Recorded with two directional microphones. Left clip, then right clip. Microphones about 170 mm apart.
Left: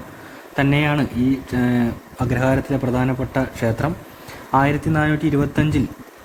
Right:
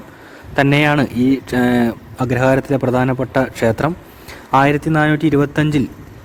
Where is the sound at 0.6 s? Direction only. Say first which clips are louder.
Right 5 dB; 70° right (ahead or behind).